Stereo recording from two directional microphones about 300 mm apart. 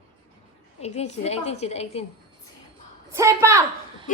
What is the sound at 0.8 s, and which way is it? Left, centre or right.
A woman's voice, left.